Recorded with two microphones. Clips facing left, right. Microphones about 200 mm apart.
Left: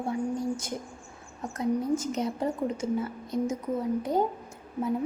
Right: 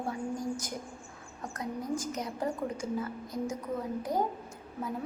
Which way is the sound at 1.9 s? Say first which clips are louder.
Left 6 dB; 25° left (ahead or behind).